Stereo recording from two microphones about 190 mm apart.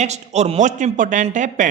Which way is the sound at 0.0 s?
35° right (ahead or behind).